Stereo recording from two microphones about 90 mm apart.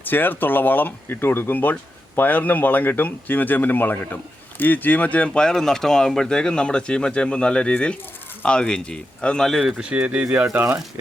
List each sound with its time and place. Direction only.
0.0 s speech: 20° left (ahead or behind); by 9.7 s centre (ahead or behind)
9.7 s speech: 15° right (ahead or behind)
10.4 s speech: 25° right (ahead or behind)